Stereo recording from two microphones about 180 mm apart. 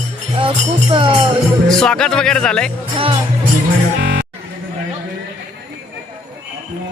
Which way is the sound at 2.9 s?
30° right (ahead or behind).